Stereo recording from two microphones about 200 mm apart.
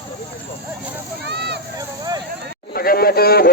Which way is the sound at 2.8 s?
50° left (ahead or behind).